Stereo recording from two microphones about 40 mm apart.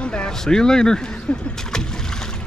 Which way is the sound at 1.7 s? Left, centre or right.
Centre.